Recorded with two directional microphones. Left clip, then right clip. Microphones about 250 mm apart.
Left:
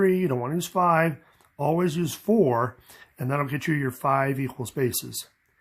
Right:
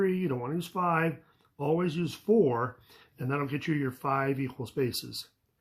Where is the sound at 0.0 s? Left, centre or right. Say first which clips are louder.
Left 7 dB; left.